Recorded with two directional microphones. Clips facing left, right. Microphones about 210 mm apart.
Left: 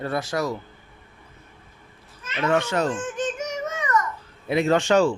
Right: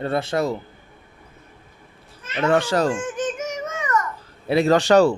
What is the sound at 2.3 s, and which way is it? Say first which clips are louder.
Speech: right 3 dB; 35° right (ahead or behind).